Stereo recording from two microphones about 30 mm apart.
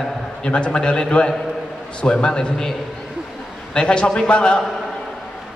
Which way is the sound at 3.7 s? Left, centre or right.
Left.